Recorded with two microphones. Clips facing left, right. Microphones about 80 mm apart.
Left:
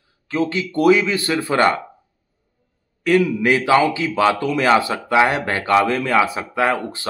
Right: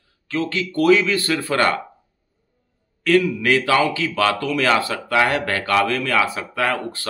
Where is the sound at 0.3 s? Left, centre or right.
Centre.